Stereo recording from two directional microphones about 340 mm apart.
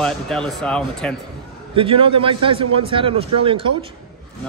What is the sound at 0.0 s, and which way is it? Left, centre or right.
Speech, centre.